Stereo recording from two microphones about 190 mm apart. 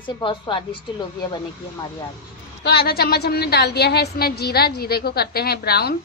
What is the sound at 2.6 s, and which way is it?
Speech, 55° left (ahead or behind).